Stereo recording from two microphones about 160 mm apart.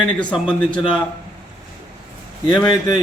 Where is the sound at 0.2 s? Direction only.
5° left (ahead or behind).